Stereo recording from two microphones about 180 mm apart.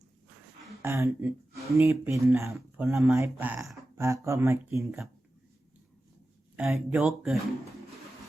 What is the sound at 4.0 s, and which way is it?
Speech, 15° right (ahead or behind).